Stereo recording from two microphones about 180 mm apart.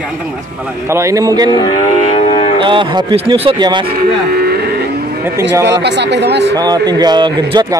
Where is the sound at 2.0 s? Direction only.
35° left (ahead or behind).